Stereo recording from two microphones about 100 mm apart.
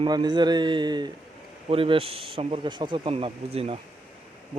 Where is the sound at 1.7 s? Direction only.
70° right (ahead or behind).